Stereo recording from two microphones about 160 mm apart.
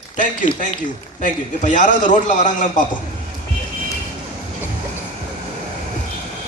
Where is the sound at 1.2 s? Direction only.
50° left (ahead or behind).